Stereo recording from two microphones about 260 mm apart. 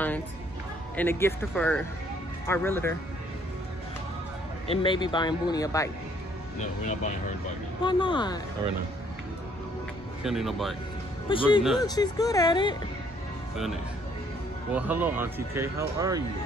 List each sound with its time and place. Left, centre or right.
0.9 s speech: centre
4.6 s speech: centre
6.6 s speech: left
10.2 s a man's voice: centre
11.2 s speech: centre
14.7 s speech: centre